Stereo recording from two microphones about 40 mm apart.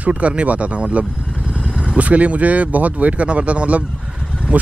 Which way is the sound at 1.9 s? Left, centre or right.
Right.